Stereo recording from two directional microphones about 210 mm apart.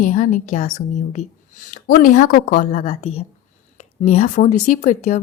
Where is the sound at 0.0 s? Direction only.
40° left (ahead or behind).